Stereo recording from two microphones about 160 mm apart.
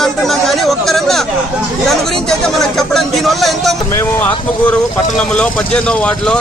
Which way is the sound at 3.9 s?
15° left (ahead or behind).